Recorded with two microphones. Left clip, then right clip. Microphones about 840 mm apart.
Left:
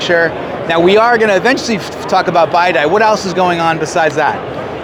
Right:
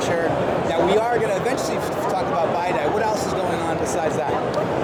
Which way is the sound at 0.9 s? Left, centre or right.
Left.